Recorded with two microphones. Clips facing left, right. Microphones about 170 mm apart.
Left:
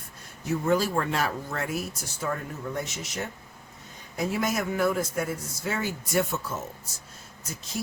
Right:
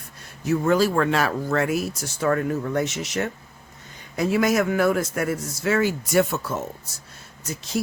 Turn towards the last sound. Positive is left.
turn(degrees=-80)